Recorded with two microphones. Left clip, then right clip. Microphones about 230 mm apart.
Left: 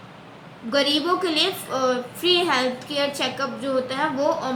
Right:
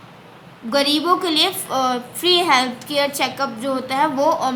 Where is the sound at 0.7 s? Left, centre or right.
Right.